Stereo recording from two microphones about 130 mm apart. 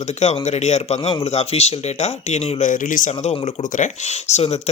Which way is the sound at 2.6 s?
90° left.